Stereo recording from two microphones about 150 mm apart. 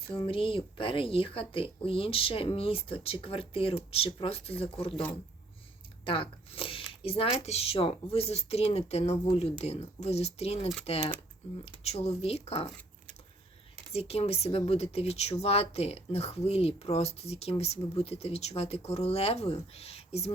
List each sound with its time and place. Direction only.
0.1 s speech: 35° left (ahead or behind)
6.1 s speech: 35° left (ahead or behind)
13.9 s speech: 45° left (ahead or behind)